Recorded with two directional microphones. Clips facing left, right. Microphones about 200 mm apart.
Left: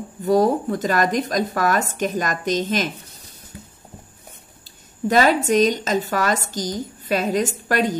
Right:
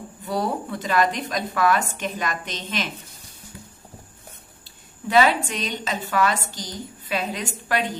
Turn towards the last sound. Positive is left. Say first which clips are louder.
# left 5 dB
turn(degrees=40)  # may be behind; listen again after turning